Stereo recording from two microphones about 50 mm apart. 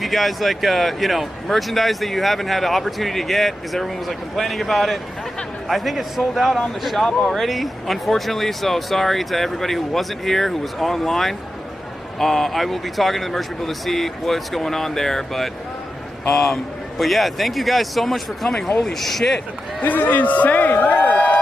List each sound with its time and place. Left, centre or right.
0.0 s speech: centre
17.0 s speech: centre
19.8 s a man's voice: left
20.8 s a sound: left